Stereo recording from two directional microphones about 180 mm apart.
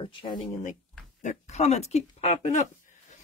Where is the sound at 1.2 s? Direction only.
40° left (ahead or behind).